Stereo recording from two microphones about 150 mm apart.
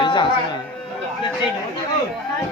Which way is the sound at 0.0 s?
30° left (ahead or behind).